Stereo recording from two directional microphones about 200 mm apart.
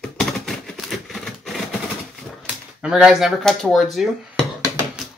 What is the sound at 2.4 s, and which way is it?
Speech, 5° right (ahead or behind).